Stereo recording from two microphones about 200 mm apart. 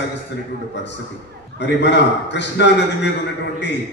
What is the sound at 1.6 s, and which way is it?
A man's voice, 60° left (ahead or behind).